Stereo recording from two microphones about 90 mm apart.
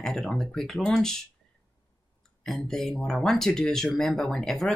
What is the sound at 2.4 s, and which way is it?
Speech, 5° left (ahead or behind).